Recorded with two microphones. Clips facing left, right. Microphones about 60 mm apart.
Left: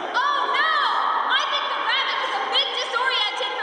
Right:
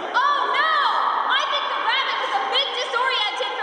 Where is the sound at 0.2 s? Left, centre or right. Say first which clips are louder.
Right 2 dB; centre.